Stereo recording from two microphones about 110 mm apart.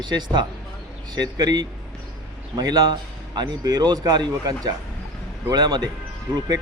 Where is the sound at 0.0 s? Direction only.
40° right (ahead or behind).